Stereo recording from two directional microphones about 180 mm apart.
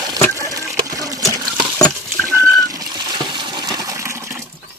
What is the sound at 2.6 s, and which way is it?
Water, 20° right (ahead or behind).